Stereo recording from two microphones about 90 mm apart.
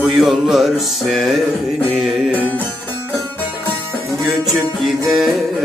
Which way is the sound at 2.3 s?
20° left (ahead or behind).